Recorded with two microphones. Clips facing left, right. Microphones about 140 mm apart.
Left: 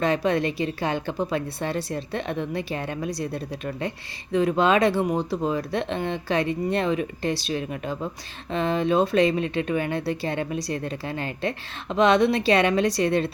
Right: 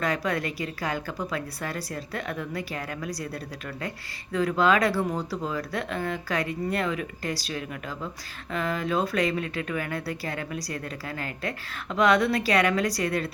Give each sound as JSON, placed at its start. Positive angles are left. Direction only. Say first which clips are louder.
{"t": 0.0, "sound": "speech", "louder": "left 5 dB", "side_deg": 25}
{"t": 11.9, "sound": "speech", "louder": "left 3 dB", "side_deg": 25}